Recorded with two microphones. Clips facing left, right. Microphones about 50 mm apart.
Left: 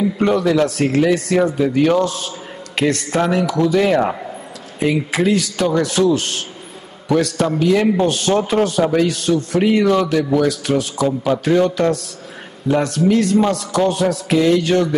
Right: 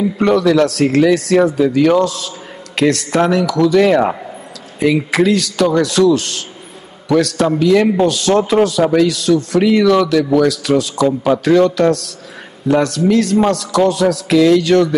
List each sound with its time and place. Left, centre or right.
0.2 s a man's voice: right
2.0 s a man's voice: right
4.0 s speech: centre
4.7 s a man's voice: right
11.1 s a man's voice: centre
11.4 s a man's voice: right